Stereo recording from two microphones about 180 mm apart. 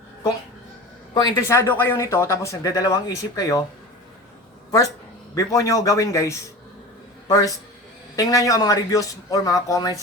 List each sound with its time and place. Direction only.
1.1 s speech: 20° left (ahead or behind)
5.3 s a man's voice: 20° left (ahead or behind)